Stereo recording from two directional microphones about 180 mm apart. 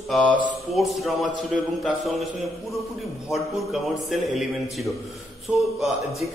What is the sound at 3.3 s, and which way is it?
A man's voice, centre (ahead or behind).